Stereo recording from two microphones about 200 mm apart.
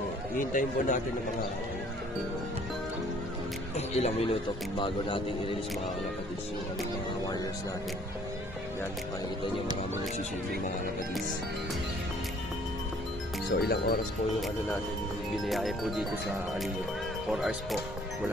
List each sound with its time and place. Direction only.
0.5 s a man's voice: 40° left (ahead or behind)
3.7 s a man's voice: 30° left (ahead or behind)
13.6 s speech: 50° left (ahead or behind)
15.4 s speech: centre (ahead or behind)
17.3 s speech: centre (ahead or behind)